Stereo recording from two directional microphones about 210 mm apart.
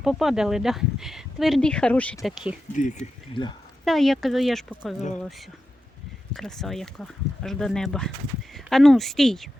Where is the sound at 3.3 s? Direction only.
20° left (ahead or behind).